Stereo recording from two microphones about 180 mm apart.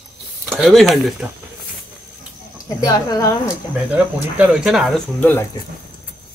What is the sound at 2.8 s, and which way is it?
Speech, 20° left (ahead or behind).